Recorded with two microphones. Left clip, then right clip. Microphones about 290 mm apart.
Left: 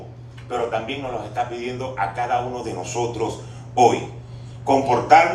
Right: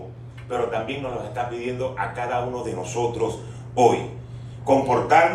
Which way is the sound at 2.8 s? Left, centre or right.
Left.